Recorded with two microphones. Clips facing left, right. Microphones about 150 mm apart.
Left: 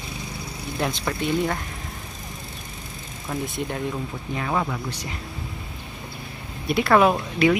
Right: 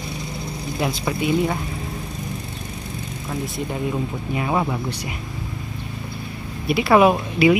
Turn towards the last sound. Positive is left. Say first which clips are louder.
# right 3 dB
turn(degrees=-10)  # may be behind; listen again after turning